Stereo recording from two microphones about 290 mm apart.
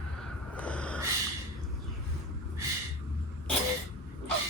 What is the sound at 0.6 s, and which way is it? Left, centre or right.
Snort, centre.